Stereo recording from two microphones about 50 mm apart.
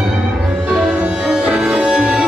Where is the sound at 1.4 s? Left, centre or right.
Centre.